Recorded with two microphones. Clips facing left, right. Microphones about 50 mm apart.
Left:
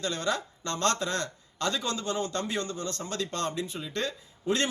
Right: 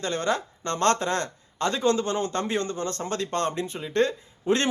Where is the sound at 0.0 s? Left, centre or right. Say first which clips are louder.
Right 4 dB; right.